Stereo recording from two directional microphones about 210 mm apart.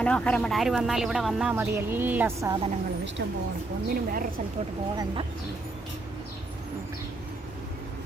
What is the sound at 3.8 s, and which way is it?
Speech, 40° right (ahead or behind).